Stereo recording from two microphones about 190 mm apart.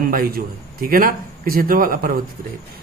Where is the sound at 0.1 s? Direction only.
50° right (ahead or behind).